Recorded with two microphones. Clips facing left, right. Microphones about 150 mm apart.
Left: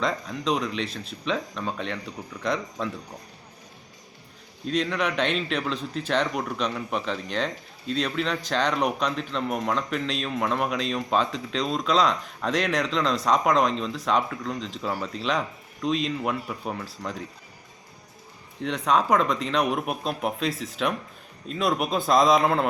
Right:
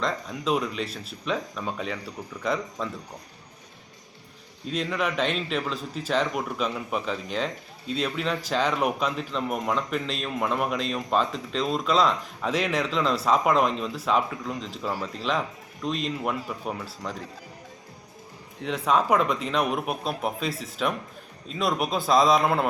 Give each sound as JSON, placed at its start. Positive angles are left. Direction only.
{"t": 0.0, "sound": "a man's voice", "side_deg": -5}
{"t": 4.6, "sound": "a man's voice", "side_deg": -5}
{"t": 18.6, "sound": "a man's voice", "side_deg": 0}